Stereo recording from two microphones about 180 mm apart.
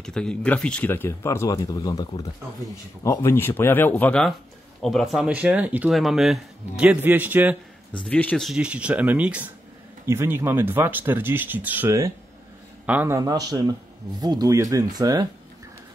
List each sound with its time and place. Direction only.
0.0 s speech: 5° left (ahead or behind)
8.0 s speech: 10° left (ahead or behind); by 15.2 s 20° right (ahead or behind)